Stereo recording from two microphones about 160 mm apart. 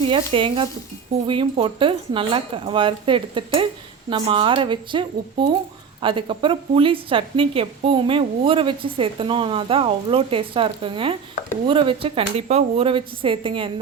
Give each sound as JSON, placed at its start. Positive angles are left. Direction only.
{"t": 0.0, "sound": "a woman's voice", "side_deg": -35}